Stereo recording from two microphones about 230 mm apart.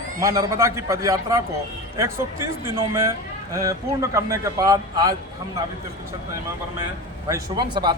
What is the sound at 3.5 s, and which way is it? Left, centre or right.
A man's voice, centre.